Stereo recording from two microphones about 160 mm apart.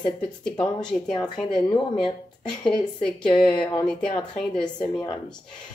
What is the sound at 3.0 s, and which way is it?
A woman's voice, 5° left (ahead or behind).